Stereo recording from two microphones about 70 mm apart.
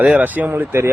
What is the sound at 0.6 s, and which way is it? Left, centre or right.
Speech, right.